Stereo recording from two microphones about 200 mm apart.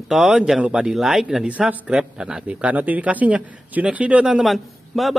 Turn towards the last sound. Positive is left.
turn(degrees=0)  # may be behind; listen again after turning